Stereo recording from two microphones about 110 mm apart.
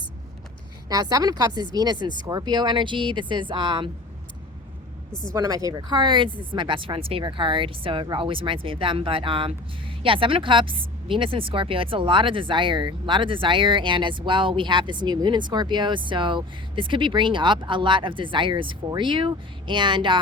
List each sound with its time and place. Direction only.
0.9 s speech: 35° right (ahead or behind)
5.3 s speech: 30° right (ahead or behind)
5.7 s speech: 45° right (ahead or behind)